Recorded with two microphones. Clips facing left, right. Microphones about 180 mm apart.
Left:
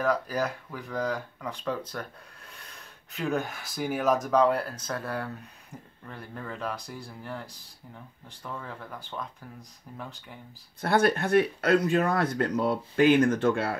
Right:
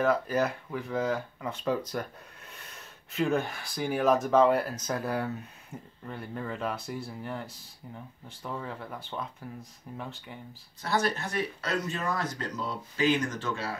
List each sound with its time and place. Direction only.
0.0 s speech: centre (ahead or behind)
2.6 s speech: centre (ahead or behind)
10.8 s speech: 55° left (ahead or behind)